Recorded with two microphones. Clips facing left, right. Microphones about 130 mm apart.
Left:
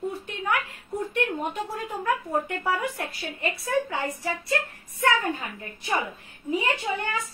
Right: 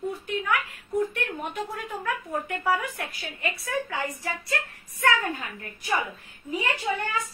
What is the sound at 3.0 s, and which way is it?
Speech, 30° left (ahead or behind).